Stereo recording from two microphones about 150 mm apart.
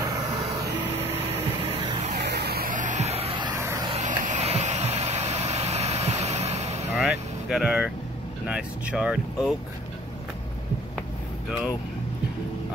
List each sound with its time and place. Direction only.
1.6 s vehicle: 40° right (ahead or behind)
2.2 s vehicle: 90° right; by 3.5 s 35° right (ahead or behind)
3.5 s vehicle: 20° right (ahead or behind)
4.2 s vehicle: 50° right (ahead or behind)
7.0 s vehicle: centre (ahead or behind)
8.5 s speech: 5° right (ahead or behind)